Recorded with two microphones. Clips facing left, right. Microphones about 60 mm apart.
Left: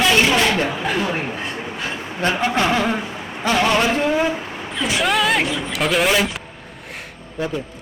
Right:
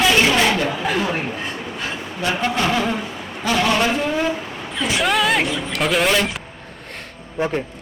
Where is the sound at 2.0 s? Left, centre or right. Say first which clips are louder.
Left 1 dB; centre.